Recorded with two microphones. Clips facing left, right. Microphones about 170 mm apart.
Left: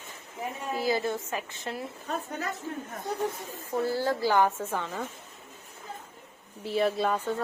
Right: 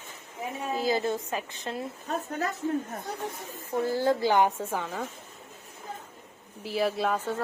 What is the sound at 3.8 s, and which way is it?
Speech, 20° right (ahead or behind).